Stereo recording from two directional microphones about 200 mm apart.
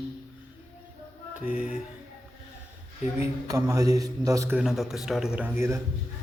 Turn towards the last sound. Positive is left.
turn(degrees=-15)  # may be behind; listen again after turning